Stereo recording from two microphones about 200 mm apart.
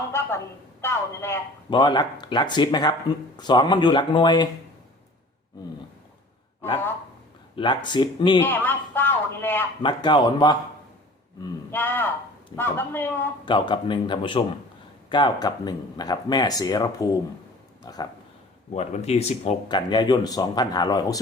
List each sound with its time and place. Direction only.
0.1 s a man's voice: 10° left (ahead or behind)
7.5 s speech: 25° left (ahead or behind)
8.4 s a man's voice: 10° left (ahead or behind)
9.8 s speech: 25° left (ahead or behind)
11.7 s a man's voice: 10° left (ahead or behind)
13.4 s speech: 25° left (ahead or behind)
18.7 s speech: 35° left (ahead or behind)